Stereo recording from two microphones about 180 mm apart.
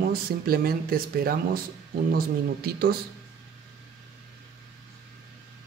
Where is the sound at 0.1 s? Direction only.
55° right (ahead or behind).